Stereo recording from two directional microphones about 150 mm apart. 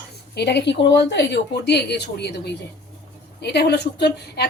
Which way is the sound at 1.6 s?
90° left.